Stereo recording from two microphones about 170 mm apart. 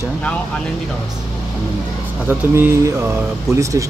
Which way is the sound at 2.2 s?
15° right (ahead or behind).